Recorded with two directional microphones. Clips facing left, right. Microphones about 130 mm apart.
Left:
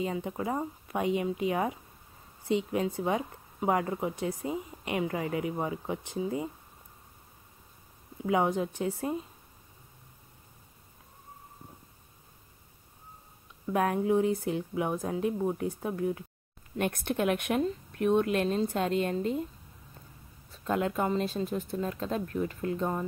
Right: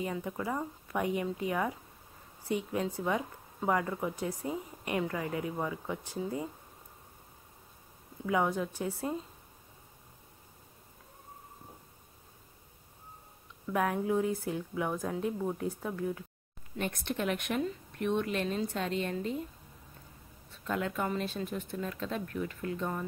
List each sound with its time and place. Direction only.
0.0 s a woman's voice: 20° left (ahead or behind)
8.3 s a woman's voice: 20° left (ahead or behind)
13.7 s a woman's voice: 25° left (ahead or behind)
16.7 s a woman's voice: 50° left (ahead or behind)
17.6 s a woman's voice: 40° left (ahead or behind)
20.5 s speech: 35° left (ahead or behind)